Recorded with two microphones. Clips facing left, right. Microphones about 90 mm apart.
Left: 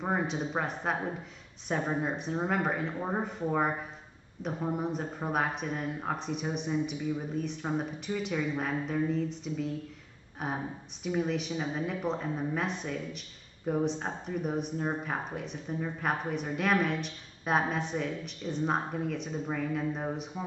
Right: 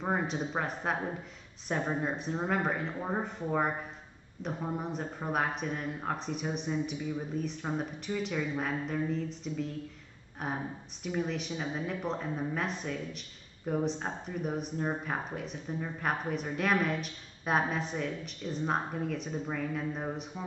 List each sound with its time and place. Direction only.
0.0 s speech: centre (ahead or behind)